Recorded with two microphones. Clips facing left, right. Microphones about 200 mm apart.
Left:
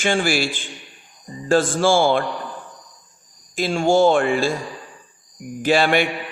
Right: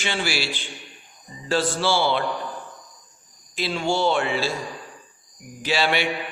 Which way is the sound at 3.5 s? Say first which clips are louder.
Left 7 dB; 45° left (ahead or behind).